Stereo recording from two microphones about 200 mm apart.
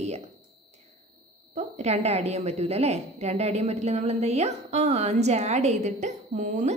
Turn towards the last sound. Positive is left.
turn(degrees=-40)  # may be behind; listen again after turning